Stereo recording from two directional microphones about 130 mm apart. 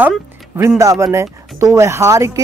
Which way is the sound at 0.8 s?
25° right (ahead or behind).